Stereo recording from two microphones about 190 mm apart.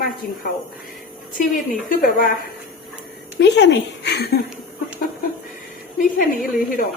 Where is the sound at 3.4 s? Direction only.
65° left (ahead or behind).